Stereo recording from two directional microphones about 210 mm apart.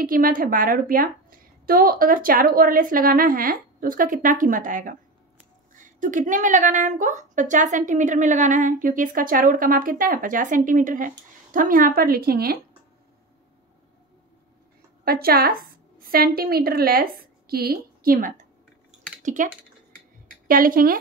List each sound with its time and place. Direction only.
0.0 s a woman's voice: 40° right (ahead or behind)
15.0 s a woman's voice: 45° right (ahead or behind)